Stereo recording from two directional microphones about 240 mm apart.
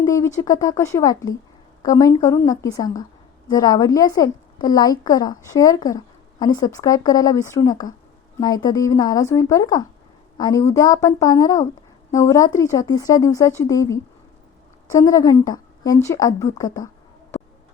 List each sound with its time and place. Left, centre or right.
0.0 s a woman's voice: centre